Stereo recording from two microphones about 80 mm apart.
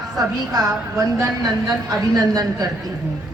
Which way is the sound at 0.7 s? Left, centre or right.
Right.